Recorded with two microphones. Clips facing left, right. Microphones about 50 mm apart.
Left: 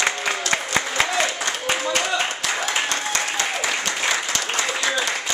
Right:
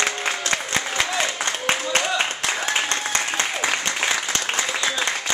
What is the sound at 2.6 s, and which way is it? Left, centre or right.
Applause, right.